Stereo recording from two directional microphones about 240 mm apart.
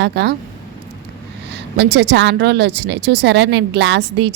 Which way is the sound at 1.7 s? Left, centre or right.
Right.